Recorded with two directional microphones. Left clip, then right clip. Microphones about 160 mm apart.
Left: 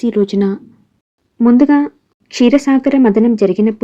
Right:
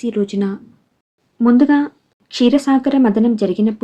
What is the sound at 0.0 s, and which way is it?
Speech, 30° left (ahead or behind).